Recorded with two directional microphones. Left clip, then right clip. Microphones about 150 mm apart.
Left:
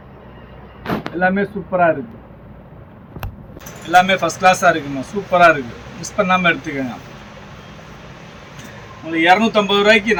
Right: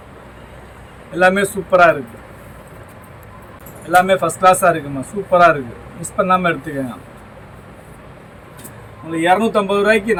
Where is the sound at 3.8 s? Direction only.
10° right (ahead or behind).